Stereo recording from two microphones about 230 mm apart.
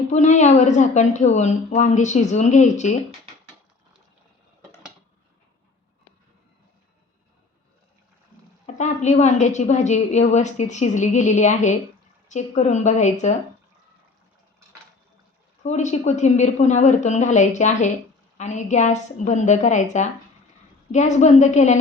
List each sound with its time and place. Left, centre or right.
0.1 s a woman's voice: left
8.6 s a woman's voice: left
15.6 s a woman's voice: left